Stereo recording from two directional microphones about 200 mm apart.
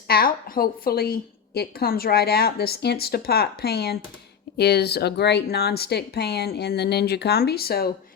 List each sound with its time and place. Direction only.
0.1 s a woman's voice: 45° left (ahead or behind)